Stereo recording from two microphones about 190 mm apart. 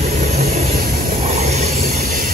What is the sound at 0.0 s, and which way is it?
Vehicle, 35° right (ahead or behind).